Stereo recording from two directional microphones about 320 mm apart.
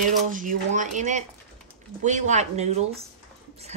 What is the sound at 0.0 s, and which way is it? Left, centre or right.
Speech, right.